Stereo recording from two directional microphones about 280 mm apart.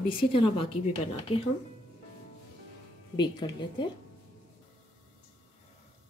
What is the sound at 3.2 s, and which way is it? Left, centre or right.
Speech, centre.